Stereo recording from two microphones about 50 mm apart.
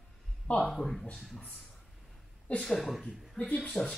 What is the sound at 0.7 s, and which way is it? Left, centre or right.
Speech, centre.